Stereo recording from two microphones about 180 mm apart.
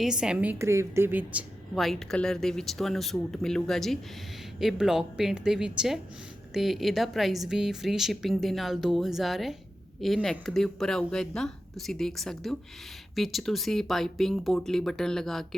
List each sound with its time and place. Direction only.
0.0 s a woman's voice: 5° right (ahead or behind)
0.6 s a woman's voice: 15° right (ahead or behind); by 15.4 s centre (ahead or behind)